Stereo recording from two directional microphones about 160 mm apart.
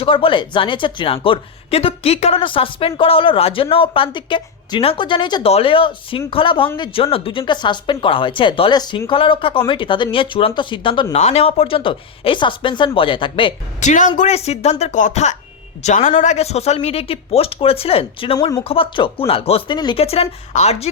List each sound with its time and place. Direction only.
0.0 s speech: 35° left (ahead or behind)
13.8 s speech: 50° left (ahead or behind)